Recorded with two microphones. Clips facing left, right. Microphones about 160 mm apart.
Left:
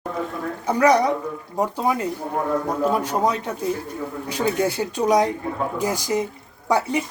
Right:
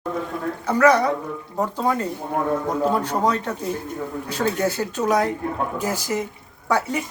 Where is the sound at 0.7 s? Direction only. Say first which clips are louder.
Even; 15° left (ahead or behind).